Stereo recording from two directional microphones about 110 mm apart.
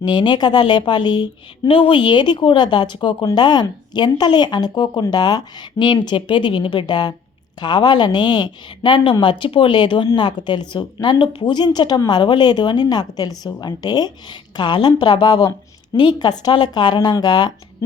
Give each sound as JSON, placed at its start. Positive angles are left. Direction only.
{"t": 0.0, "sound": "speech", "side_deg": 45}
{"t": 1.6, "sound": "a woman's voice", "side_deg": 55}